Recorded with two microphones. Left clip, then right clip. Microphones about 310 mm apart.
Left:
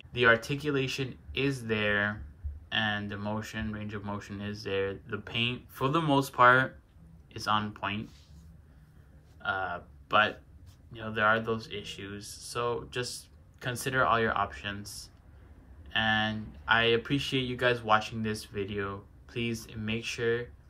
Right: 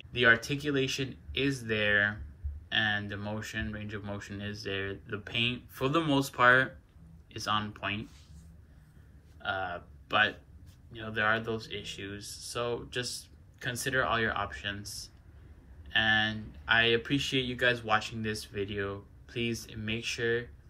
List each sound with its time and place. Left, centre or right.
0.1 s speech: centre
9.4 s speech: centre